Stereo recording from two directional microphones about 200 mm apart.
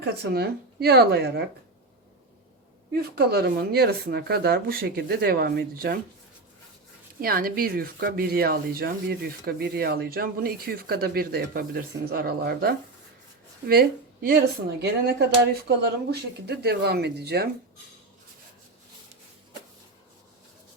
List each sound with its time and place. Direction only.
0.0 s speech: 55° right (ahead or behind)
2.9 s speech: 55° right (ahead or behind)
7.2 s speech: 45° right (ahead or behind)